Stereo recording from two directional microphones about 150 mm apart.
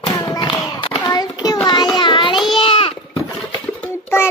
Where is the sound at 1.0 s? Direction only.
25° left (ahead or behind).